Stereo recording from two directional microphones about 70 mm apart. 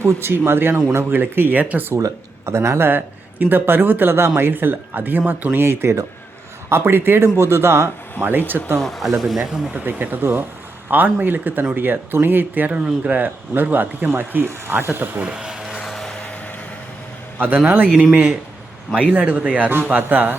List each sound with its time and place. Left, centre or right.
0.0 s speech: right
2.0 s speech: right
8.8 s speech: centre
9.4 s speech: right
15.3 s a sound: centre
15.8 s vehicle: centre
17.3 s a man's voice: right
19.1 s speech: right